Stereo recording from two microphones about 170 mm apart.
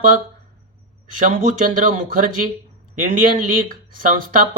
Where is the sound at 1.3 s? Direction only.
50° right (ahead or behind).